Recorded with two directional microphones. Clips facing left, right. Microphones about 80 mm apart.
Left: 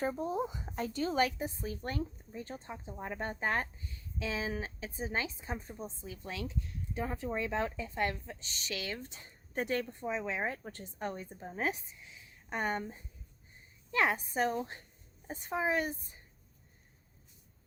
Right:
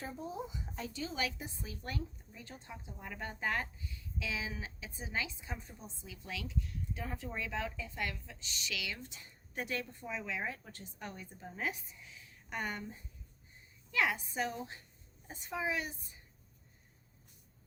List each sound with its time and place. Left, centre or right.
0.0 s a woman's voice: left
13.9 s a woman's voice: left